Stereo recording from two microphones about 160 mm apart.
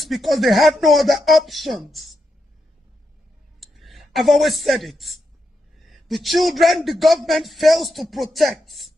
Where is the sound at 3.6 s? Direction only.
Centre (ahead or behind).